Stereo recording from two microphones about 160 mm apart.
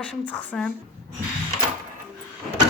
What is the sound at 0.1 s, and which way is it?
Speech, 5° left (ahead or behind).